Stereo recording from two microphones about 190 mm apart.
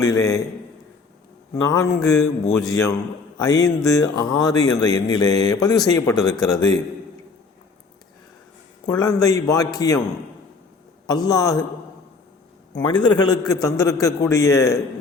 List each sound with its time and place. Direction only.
0.0 s a man's voice: 20° left (ahead or behind)
1.6 s a man's voice: 15° left (ahead or behind)
9.0 s speech: 20° left (ahead or behind)
11.3 s speech: 20° left (ahead or behind)
12.8 s a man's voice: 25° left (ahead or behind)